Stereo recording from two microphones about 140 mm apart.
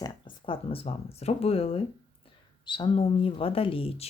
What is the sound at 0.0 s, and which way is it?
Speech, 35° left (ahead or behind).